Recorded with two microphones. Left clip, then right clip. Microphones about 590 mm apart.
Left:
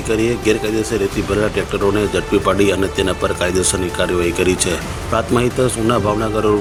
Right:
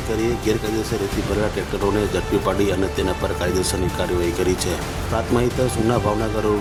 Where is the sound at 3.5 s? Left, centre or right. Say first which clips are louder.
Left 4 dB; right.